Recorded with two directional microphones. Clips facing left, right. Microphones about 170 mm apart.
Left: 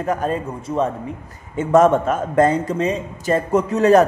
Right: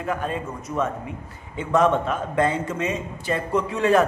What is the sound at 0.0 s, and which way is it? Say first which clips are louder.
Speech: left 5 dB; 40° left (ahead or behind).